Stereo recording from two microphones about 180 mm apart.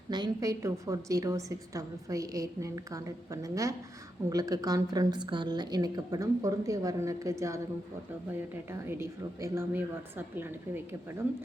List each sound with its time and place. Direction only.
0.1 s a woman's voice: 20° right (ahead or behind)
8.9 s a woman's voice: 15° right (ahead or behind)